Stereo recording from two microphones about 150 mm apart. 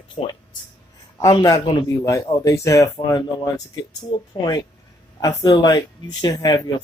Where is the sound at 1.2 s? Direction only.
25° left (ahead or behind).